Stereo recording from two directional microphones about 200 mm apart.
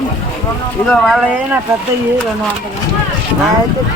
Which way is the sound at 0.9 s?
Centre (ahead or behind).